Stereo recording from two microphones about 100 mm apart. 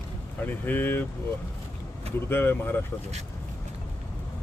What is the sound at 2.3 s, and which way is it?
Speech, 20° left (ahead or behind).